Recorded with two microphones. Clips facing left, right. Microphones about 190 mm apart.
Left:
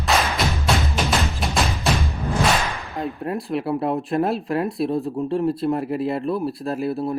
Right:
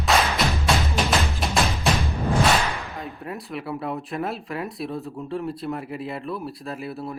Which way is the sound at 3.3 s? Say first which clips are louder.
Left 7 dB; 30° left (ahead or behind).